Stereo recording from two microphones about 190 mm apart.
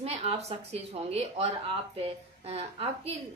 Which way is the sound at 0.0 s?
30° right (ahead or behind).